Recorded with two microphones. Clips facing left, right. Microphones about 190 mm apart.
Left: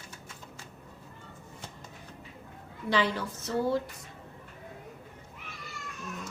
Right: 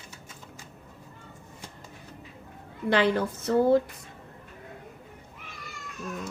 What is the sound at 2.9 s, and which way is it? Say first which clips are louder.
Speech: right 5 dB; 55° right (ahead or behind).